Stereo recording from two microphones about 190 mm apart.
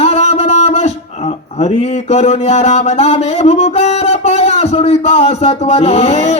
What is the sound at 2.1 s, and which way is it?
Music, 35° left (ahead or behind).